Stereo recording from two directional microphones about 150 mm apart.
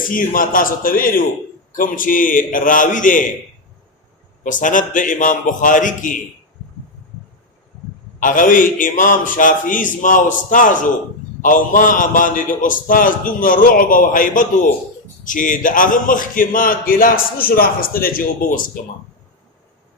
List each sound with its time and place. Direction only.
0.1 s a man's voice: 65° left (ahead or behind)
4.4 s a man's voice: 60° left (ahead or behind)
8.2 s a man's voice: 60° left (ahead or behind)